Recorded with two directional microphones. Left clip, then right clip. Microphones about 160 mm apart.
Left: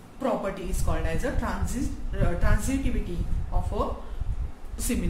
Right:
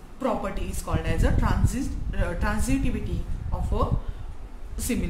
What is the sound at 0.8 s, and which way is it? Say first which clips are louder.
A woman's voice: right 2 dB; 35° right (ahead or behind).